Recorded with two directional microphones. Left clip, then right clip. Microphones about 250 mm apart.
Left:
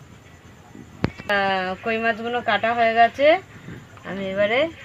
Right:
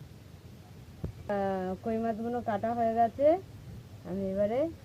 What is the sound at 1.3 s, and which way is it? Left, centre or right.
Speech, centre.